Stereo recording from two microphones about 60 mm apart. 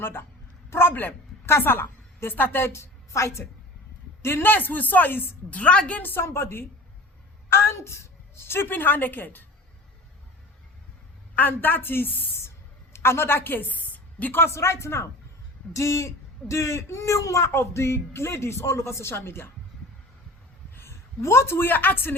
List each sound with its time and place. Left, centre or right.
0.0 s a woman's voice: left
4.5 s speech: left
5.5 s speech: left
6.0 s speech: left
8.4 s a woman's voice: left
11.3 s a woman's voice: left
12.4 s a sound: left
14.4 s speech: left
15.7 s speech: left
17.4 s speech: left
20.7 s a woman's voice: left